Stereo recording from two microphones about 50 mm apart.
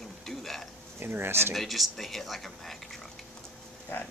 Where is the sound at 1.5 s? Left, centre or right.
Centre.